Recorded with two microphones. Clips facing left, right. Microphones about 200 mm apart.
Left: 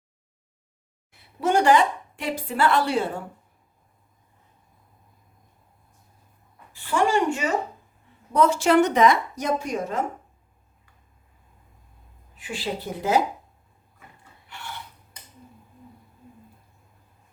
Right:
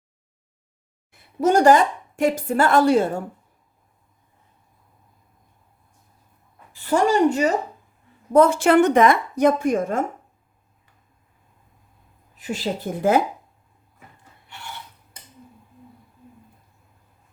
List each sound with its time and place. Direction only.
1.1 s a woman's voice: 40° right (ahead or behind)
6.9 s speech: 40° right (ahead or behind)
8.3 s speech: 50° right (ahead or behind)
12.4 s speech: 40° right (ahead or behind)